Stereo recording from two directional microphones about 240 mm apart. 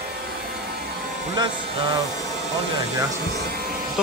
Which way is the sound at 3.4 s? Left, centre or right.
Right.